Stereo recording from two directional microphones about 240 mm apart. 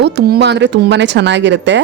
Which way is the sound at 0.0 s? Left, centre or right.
Right.